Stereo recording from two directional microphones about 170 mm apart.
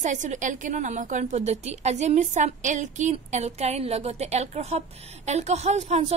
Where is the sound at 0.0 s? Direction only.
45° right (ahead or behind).